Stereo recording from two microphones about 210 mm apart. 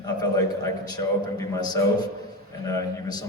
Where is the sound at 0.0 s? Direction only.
20° left (ahead or behind).